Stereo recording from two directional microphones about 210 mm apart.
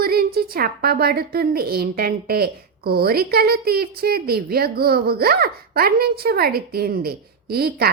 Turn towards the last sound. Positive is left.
turn(degrees=-45)  # may be behind; listen again after turning